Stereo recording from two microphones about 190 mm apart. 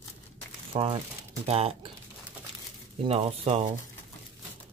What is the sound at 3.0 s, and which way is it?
Speech, 30° right (ahead or behind).